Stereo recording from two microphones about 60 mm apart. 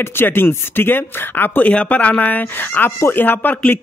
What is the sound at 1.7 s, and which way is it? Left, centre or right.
Speech, left.